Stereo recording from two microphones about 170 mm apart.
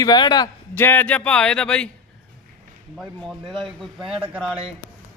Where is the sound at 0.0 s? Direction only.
25° left (ahead or behind).